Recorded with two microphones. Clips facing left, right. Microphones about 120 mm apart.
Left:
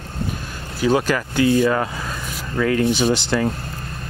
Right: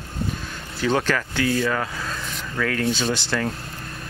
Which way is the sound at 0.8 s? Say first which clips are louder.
Left 4 dB; 10° left (ahead or behind).